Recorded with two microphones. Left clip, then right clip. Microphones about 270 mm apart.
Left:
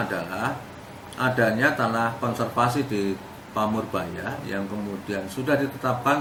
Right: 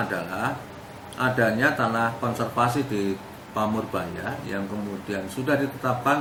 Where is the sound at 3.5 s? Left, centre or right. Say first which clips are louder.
Left 1 dB; left.